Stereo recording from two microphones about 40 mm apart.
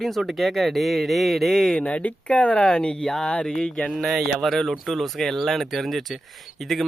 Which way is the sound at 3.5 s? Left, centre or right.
Centre.